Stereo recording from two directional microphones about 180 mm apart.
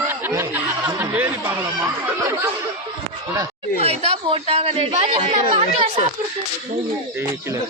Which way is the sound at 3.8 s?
35° right (ahead or behind).